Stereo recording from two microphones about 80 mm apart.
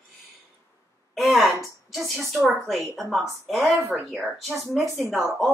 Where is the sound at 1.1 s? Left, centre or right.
Centre.